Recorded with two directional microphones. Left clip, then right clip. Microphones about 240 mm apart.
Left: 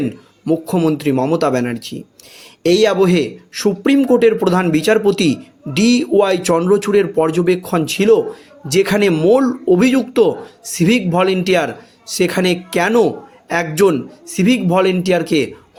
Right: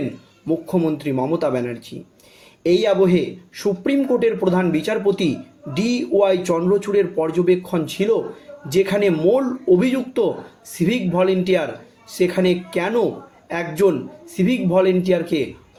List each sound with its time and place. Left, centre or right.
0.4 s speech: left